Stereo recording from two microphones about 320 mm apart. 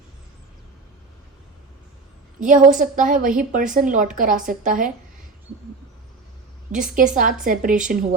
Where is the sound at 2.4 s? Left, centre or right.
Right.